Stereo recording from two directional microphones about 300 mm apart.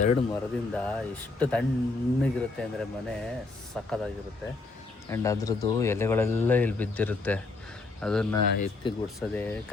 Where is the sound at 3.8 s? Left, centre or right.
Centre.